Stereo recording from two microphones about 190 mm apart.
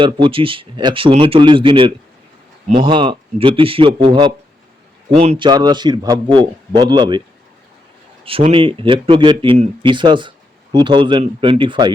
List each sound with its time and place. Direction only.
0.0 s a man's voice: 25° right (ahead or behind)
5.5 s speech: 20° right (ahead or behind)
8.2 s speech: 30° right (ahead or behind)